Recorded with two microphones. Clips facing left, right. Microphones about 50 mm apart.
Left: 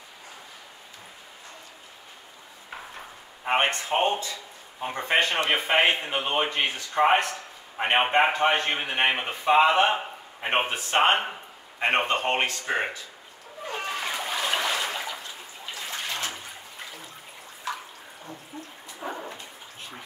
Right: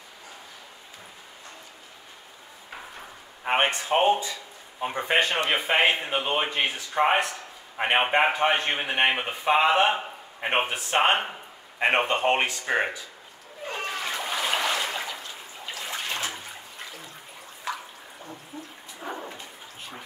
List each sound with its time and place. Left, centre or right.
3.4 s speech: centre
5.5 s speech: centre
11.8 s speech: centre
13.7 s splash: centre
15.9 s water: centre
18.9 s dog: centre